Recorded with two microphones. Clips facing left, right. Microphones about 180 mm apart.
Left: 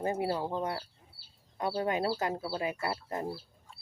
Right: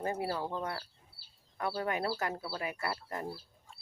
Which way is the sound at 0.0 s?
20° left (ahead or behind).